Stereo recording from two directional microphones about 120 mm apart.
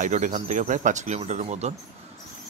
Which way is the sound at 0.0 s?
90° right.